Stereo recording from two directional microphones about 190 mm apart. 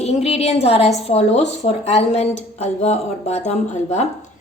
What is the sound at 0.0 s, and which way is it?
Speech, 35° left (ahead or behind).